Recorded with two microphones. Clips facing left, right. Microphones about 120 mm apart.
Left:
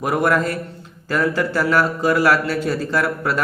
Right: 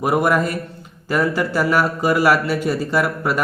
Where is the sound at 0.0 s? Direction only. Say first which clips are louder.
Right 1 dB; 15° right (ahead or behind).